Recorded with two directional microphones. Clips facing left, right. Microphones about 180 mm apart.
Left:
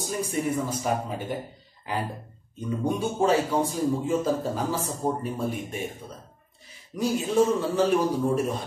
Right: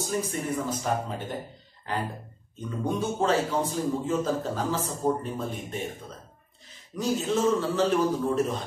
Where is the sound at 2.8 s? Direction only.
10° left (ahead or behind).